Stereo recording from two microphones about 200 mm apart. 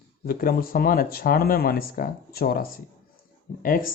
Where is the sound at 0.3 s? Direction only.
45° left (ahead or behind).